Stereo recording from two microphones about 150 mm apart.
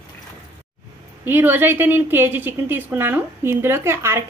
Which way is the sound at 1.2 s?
15° right (ahead or behind).